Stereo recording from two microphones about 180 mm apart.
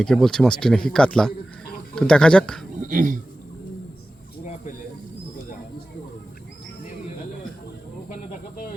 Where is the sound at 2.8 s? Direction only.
45° right (ahead or behind).